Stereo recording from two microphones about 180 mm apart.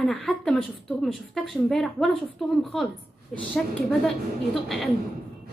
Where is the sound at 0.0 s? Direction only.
5° left (ahead or behind).